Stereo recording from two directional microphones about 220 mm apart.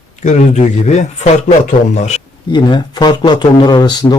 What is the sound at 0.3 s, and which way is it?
A man's voice, 30° left (ahead or behind).